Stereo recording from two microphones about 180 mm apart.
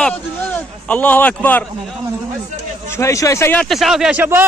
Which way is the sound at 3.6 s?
Centre (ahead or behind).